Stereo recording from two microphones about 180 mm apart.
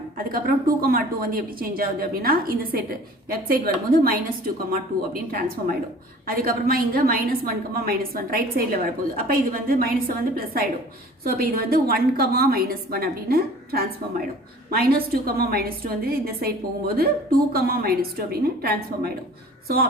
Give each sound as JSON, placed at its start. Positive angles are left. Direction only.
{"t": 0.3, "sound": "speech", "side_deg": -55}
{"t": 6.2, "sound": "speech", "side_deg": -55}